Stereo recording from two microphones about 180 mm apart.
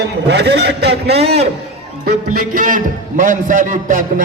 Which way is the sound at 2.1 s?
50° right (ahead or behind).